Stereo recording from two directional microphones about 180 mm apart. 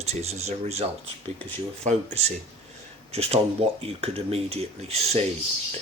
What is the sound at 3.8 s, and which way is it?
Speech, 35° right (ahead or behind).